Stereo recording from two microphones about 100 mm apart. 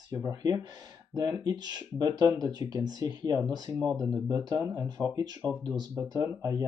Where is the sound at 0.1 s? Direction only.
35° right (ahead or behind).